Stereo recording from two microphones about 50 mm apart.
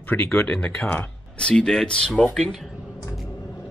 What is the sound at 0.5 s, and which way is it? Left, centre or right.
Speech, left.